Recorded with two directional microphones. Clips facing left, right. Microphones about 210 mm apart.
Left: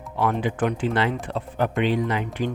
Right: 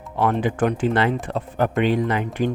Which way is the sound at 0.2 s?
45° right (ahead or behind).